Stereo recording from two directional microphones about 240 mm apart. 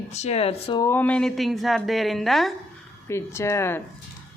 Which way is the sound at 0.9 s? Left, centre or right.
Centre.